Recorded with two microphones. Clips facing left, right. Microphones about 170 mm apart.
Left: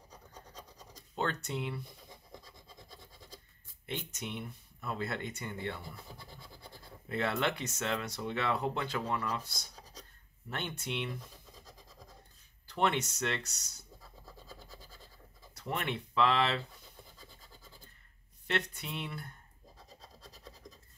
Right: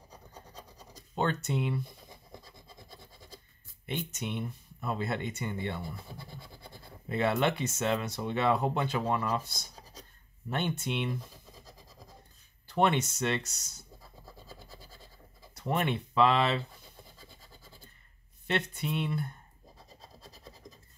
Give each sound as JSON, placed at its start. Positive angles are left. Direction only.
{"t": 1.1, "sound": "speech", "side_deg": -25}
{"t": 3.8, "sound": "speech", "side_deg": -20}
{"t": 7.1, "sound": "speech", "side_deg": -20}
{"t": 12.8, "sound": "speech", "side_deg": -25}
{"t": 15.6, "sound": "speech", "side_deg": -25}
{"t": 18.5, "sound": "speech", "side_deg": -25}